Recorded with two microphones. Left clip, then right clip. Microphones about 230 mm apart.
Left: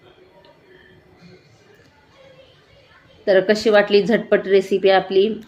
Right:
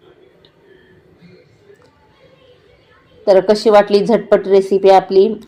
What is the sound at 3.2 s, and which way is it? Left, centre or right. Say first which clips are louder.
A woman's voice: right 5 dB; centre.